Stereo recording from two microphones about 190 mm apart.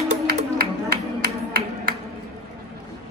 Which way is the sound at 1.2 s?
55° right (ahead or behind).